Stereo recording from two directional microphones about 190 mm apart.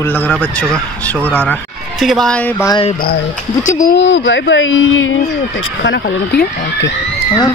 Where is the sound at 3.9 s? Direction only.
75° left (ahead or behind).